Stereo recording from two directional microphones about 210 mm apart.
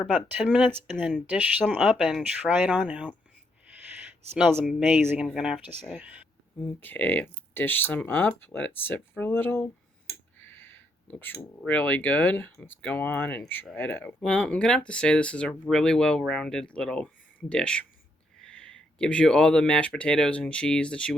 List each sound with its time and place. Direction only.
0.0 s speech: centre (ahead or behind)
4.5 s speech: 5° right (ahead or behind)
6.7 s speech: 10° left (ahead or behind)
10.4 s a sound: 10° left (ahead or behind)
11.6 s speech: 5° left (ahead or behind)
18.3 s a sound: 5° left (ahead or behind)
20.0 s speech: 5° left (ahead or behind)